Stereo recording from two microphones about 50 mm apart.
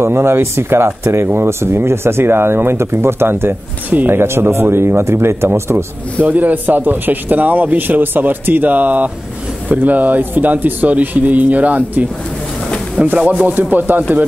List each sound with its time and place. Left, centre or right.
0.0 s speech: right
6.2 s speech: right
13.0 s speech: centre
13.6 s speech: right